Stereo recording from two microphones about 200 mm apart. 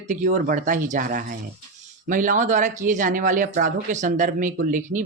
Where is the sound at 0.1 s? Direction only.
40° right (ahead or behind).